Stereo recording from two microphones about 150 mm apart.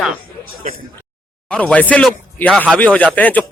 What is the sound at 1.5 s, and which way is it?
A man's voice, 10° left (ahead or behind).